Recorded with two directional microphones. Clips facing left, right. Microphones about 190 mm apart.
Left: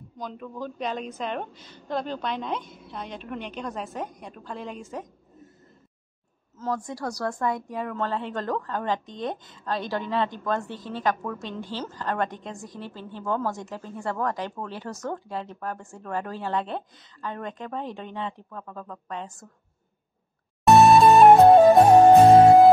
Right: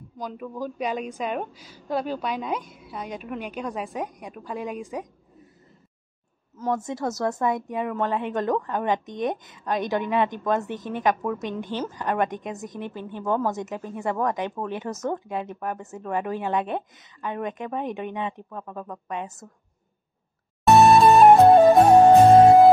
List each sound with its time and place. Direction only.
0.2 s a woman's voice: 10° right (ahead or behind)
6.6 s a woman's voice: 20° right (ahead or behind)
20.6 s music: centre (ahead or behind)